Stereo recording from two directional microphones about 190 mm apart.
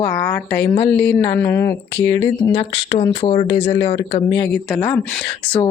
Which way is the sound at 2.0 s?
65° left (ahead or behind).